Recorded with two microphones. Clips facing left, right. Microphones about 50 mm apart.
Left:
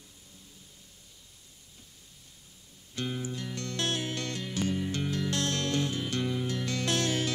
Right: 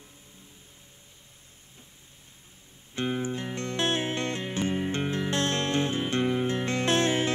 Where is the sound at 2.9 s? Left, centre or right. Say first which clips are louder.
Right 5 dB; right.